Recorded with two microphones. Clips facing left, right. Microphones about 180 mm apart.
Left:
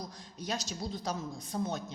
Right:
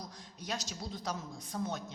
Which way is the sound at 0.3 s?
30° left (ahead or behind).